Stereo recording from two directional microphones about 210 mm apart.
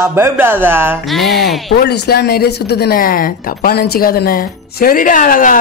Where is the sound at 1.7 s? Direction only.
50° left (ahead or behind).